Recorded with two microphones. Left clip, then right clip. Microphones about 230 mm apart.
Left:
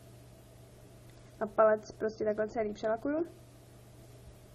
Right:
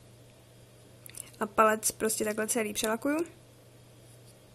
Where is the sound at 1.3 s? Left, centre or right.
Right.